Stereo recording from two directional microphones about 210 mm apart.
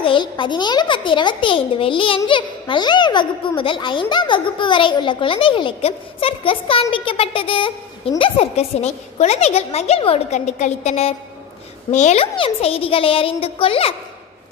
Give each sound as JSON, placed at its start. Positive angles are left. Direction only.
{"t": 0.0, "sound": "a child's voice", "side_deg": 25}